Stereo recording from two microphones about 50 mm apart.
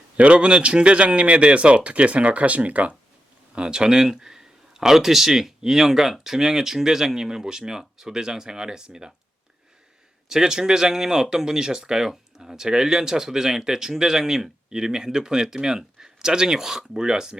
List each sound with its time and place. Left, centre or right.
0.2 s speech: right
3.5 s speech: centre
10.2 s speech: centre